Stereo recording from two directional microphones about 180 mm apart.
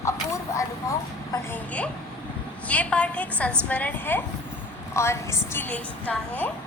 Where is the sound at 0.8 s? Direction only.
15° left (ahead or behind).